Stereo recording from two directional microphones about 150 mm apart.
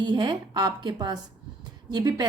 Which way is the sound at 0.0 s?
30° right (ahead or behind).